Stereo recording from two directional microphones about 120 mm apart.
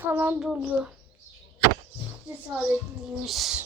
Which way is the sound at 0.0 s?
20° right (ahead or behind).